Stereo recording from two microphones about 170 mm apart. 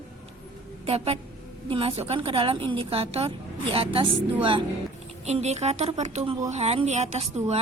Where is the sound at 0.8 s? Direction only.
35° right (ahead or behind).